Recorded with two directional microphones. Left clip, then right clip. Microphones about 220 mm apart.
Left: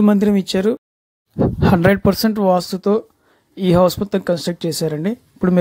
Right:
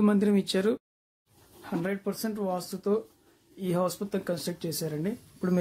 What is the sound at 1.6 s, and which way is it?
Speech, 45° left (ahead or behind).